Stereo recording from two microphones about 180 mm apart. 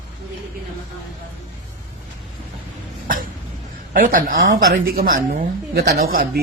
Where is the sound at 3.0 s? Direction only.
50° right (ahead or behind).